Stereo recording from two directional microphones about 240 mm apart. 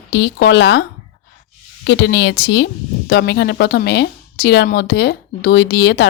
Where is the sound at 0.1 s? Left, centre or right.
Left.